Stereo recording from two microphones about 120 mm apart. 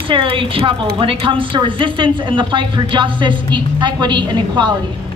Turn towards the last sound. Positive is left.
turn(degrees=-40)  # may be behind; listen again after turning